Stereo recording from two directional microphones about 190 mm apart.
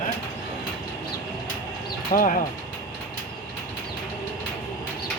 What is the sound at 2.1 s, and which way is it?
Speech, 45° left (ahead or behind).